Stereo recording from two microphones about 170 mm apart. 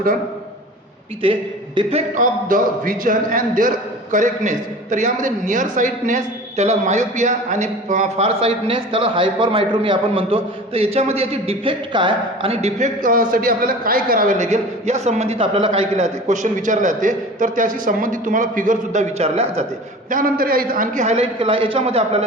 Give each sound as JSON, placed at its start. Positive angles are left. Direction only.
{"t": 1.2, "sound": "a man's voice", "side_deg": -30}
{"t": 2.2, "sound": "a man's voice", "side_deg": -55}
{"t": 19.2, "sound": "a man's voice", "side_deg": -35}
{"t": 20.1, "sound": "a man's voice", "side_deg": -55}